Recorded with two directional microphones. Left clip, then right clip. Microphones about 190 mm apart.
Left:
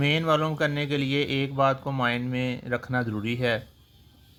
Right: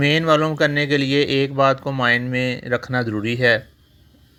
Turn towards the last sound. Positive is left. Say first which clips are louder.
# right 9 dB
turn(degrees=-20)  # may be behind; listen again after turning